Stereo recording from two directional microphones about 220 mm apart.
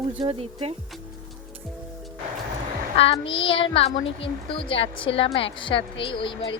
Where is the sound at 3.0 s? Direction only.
25° left (ahead or behind).